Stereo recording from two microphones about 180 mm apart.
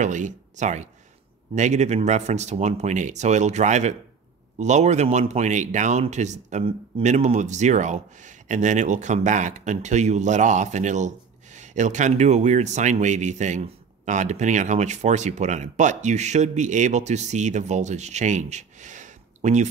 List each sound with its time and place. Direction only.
0.0 s speech: 40° right (ahead or behind)